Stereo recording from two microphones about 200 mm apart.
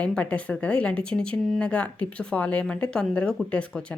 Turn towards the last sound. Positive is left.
turn(degrees=5)  # may be behind; listen again after turning